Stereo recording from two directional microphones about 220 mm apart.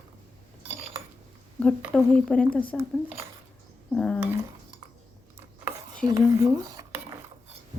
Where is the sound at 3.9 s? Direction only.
5° left (ahead or behind).